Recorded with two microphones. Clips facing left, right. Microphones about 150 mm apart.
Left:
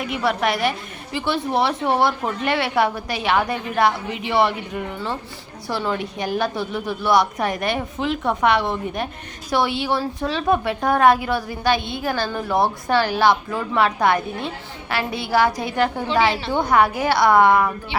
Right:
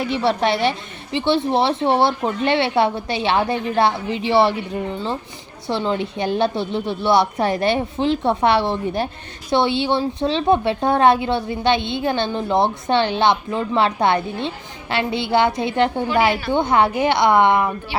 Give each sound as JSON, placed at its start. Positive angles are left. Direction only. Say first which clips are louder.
{"t": 0.0, "sound": "a woman's voice", "louder": "right 3 dB", "side_deg": -30}